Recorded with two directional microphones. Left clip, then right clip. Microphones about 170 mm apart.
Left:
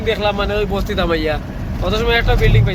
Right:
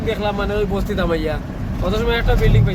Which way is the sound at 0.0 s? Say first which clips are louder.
Left 4 dB; 10° right (ahead or behind).